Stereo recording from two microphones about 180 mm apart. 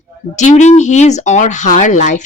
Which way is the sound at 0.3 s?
40° left (ahead or behind).